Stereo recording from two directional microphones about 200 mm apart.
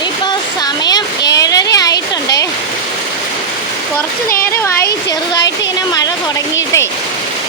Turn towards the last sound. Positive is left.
turn(degrees=15)  # may be behind; listen again after turning